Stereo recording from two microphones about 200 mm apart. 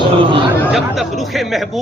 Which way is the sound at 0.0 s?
25° right (ahead or behind).